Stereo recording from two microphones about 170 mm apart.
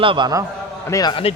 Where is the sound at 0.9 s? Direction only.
25° left (ahead or behind).